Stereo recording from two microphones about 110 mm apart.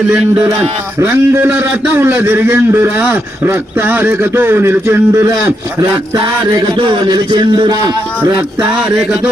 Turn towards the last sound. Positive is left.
turn(degrees=-40)  # may be behind; listen again after turning